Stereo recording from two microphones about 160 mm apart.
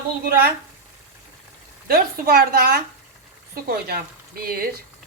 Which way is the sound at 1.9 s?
65° right (ahead or behind).